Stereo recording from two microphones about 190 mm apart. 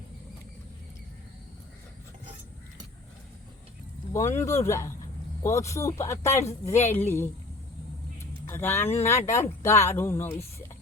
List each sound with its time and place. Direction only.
4.1 s speech: 15° left (ahead or behind)
8.4 s speech: 10° left (ahead or behind)